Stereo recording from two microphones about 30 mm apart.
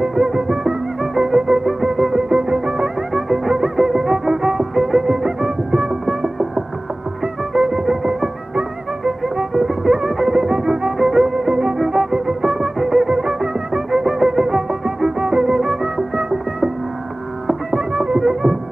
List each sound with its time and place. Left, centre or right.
0.0 s music: centre